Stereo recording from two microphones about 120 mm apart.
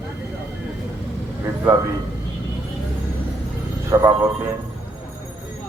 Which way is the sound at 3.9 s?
20° right (ahead or behind).